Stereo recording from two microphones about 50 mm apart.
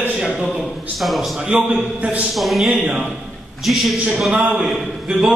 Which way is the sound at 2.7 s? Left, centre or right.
Centre.